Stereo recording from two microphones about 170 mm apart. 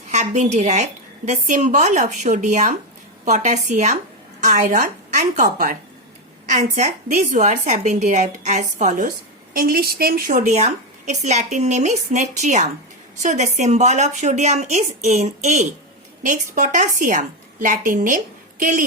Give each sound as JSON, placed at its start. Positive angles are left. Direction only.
{"t": 0.1, "sound": "a woman's voice", "side_deg": -45}